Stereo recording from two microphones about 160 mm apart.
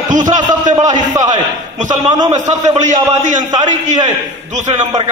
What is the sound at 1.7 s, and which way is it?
A man's voice, 50° right (ahead or behind).